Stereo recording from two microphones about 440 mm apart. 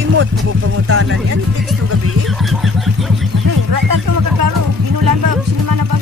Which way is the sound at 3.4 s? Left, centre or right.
Right.